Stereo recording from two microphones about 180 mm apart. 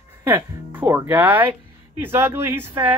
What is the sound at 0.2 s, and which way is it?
Speech, 10° right (ahead or behind).